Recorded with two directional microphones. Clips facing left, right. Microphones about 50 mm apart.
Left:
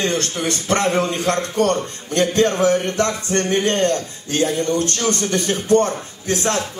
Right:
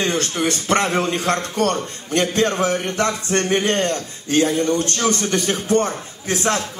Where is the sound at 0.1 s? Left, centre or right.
Right.